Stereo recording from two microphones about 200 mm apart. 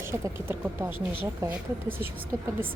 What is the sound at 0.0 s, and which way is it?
A woman's voice, 15° right (ahead or behind).